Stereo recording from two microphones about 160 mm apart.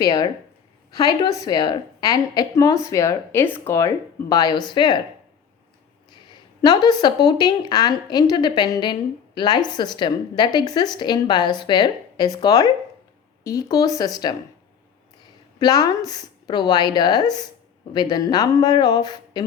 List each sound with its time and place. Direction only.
0.0 s a woman's voice: 25° left (ahead or behind)
6.6 s a woman's voice: 25° left (ahead or behind)
15.5 s a woman's voice: 25° left (ahead or behind)